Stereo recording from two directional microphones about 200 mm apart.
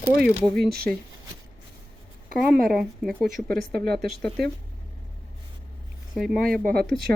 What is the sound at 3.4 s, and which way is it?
Speech, 50° right (ahead or behind).